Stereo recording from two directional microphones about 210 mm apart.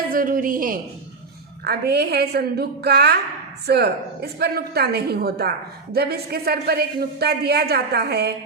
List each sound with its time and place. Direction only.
0.1 s a woman's voice: 40° right (ahead or behind)